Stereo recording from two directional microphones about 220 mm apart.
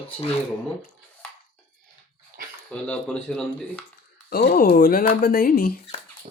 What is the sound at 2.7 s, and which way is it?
Speech, 5° left (ahead or behind).